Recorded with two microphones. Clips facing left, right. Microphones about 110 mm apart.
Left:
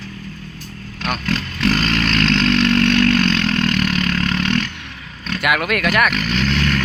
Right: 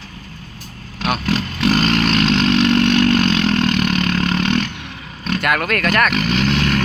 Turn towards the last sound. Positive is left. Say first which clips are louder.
# right 2 dB
turn(degrees=-5)  # may be behind; listen again after turning